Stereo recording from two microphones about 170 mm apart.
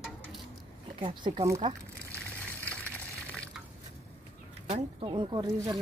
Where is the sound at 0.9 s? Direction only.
30° right (ahead or behind).